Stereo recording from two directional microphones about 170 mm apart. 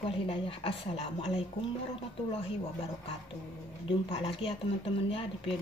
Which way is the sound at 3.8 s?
30° left (ahead or behind).